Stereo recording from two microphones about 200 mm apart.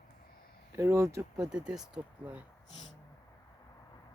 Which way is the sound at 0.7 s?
15° right (ahead or behind).